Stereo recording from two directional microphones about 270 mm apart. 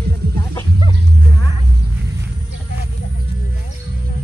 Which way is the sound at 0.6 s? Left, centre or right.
Centre.